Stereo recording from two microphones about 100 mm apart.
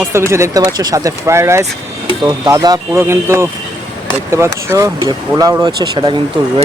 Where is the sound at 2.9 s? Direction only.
25° right (ahead or behind); by 6.1 s 50° right (ahead or behind).